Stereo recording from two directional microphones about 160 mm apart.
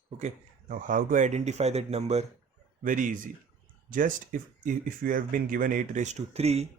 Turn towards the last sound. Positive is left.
turn(degrees=-40)  # may be behind; listen again after turning